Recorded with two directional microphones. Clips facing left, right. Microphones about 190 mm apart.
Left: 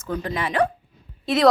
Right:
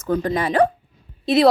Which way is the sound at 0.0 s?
40° right (ahead or behind).